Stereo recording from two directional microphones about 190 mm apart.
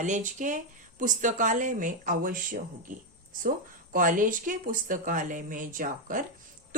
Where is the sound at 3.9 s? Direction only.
45° right (ahead or behind).